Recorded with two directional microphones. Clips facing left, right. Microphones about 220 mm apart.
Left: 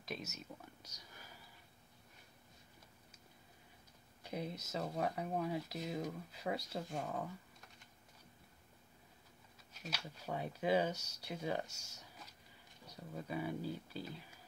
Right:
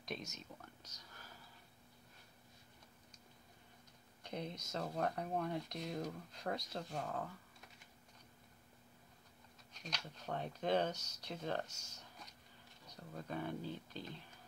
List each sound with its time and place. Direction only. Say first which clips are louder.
0.0 s speech: left 1 dB; 5° left (ahead or behind)
4.2 s speech: left 2 dB; 5° left (ahead or behind)
9.8 s speech: left 2 dB; 5° left (ahead or behind)